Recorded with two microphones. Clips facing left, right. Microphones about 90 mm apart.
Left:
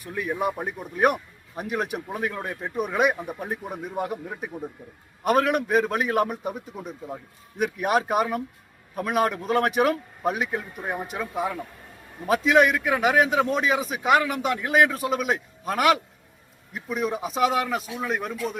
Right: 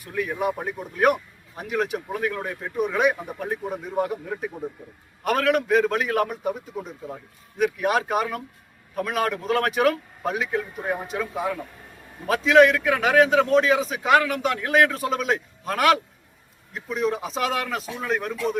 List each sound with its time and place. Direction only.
0.6 s a man's voice: 20° left (ahead or behind)
6.2 s a man's voice: 10° left (ahead or behind)
7.6 s a man's voice: 20° left (ahead or behind)